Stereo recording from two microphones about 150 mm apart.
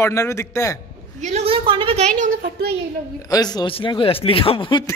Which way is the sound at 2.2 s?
70° right (ahead or behind).